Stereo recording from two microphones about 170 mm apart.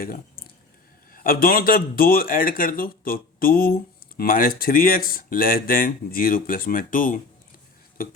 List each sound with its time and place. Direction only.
1.1 s speech: 55° left (ahead or behind)